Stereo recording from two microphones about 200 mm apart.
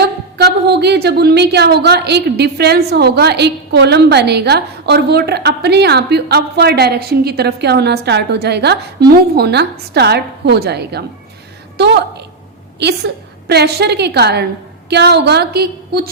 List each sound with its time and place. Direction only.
0.0 s a woman's voice: 55° right (ahead or behind)